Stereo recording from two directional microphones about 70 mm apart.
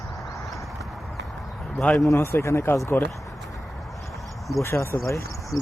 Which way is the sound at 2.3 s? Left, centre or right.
Left.